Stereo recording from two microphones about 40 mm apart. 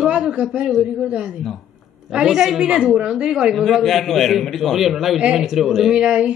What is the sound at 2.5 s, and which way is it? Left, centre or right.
Speech, right.